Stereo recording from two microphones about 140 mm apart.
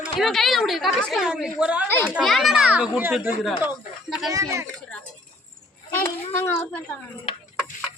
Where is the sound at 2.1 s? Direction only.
Centre (ahead or behind).